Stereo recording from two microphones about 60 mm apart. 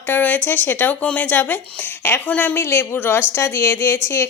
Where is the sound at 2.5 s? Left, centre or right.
Left.